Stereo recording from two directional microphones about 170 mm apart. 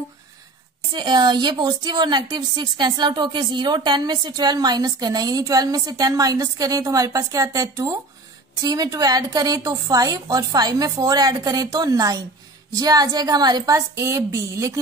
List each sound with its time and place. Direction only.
0.9 s a woman's voice: 25° right (ahead or behind)